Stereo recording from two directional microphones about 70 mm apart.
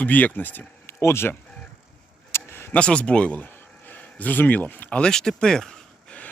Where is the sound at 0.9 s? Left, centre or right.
Left.